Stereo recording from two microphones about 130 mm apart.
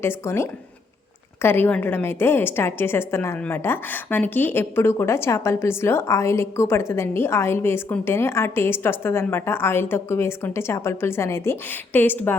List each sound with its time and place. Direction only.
0.0 s a woman's voice: 20° left (ahead or behind)